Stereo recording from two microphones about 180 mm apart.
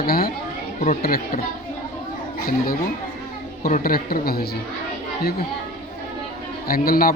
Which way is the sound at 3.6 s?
50° left (ahead or behind).